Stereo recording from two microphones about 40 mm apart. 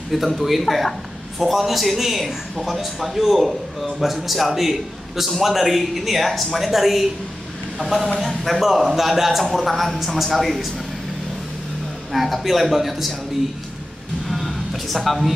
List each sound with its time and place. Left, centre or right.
0.1 s a man's voice: centre
12.1 s a man's voice: centre
14.2 s music: centre